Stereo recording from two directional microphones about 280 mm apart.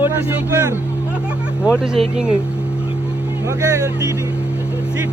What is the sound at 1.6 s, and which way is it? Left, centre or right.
Speech, centre.